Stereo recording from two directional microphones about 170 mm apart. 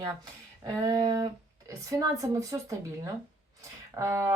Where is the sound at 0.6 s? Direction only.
20° right (ahead or behind).